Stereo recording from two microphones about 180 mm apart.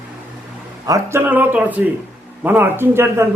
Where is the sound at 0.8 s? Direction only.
15° right (ahead or behind).